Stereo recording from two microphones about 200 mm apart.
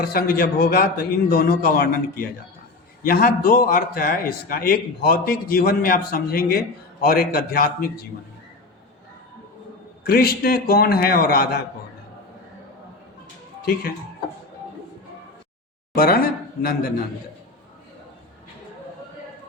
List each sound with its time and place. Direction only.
0.0 s a man's voice: 50° left (ahead or behind)
10.0 s a man's voice: 50° left (ahead or behind)
13.6 s speech: 50° left (ahead or behind)
16.0 s speech: 45° left (ahead or behind)